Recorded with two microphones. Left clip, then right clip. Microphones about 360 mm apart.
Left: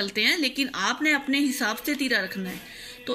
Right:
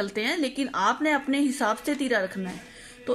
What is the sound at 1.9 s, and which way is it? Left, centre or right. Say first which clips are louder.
Speech: even; right.